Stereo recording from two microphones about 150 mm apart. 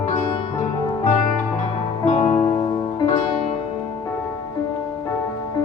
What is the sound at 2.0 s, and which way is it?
Music, 50° left (ahead or behind).